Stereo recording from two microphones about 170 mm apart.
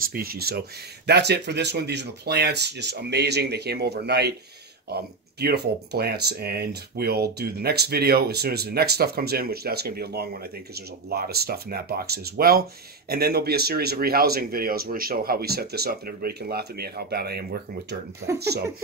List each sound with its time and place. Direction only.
0.1 s speech: 60° right (ahead or behind)